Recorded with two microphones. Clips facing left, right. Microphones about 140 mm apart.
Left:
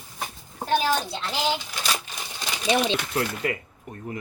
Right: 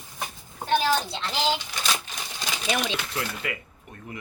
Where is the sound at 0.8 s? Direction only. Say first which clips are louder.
Even; 5° left (ahead or behind).